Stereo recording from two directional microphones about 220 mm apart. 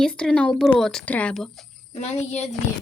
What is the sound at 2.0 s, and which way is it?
Speech, 30° left (ahead or behind).